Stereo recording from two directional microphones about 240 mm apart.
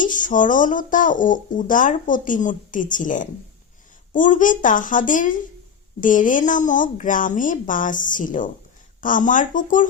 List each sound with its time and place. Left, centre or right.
0.0 s speech: left